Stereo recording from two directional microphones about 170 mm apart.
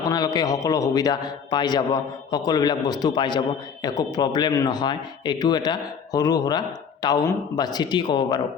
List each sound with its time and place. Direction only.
0.0 s a man's voice: 20° left (ahead or behind)